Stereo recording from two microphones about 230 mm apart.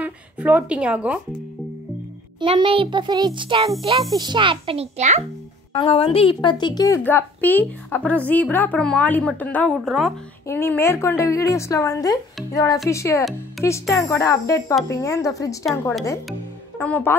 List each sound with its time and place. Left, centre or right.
0.0 s a woman's voice: centre
2.4 s a child's voice: right
5.7 s a woman's voice: left
16.8 s a woman's voice: centre